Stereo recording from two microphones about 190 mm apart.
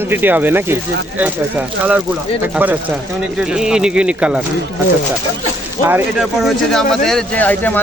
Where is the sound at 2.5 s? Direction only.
10° right (ahead or behind).